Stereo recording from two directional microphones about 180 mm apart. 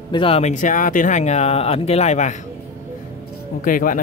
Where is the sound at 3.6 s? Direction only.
50° left (ahead or behind).